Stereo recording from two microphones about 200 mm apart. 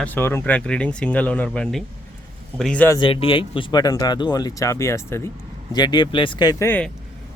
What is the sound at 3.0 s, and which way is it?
Speech, 25° left (ahead or behind).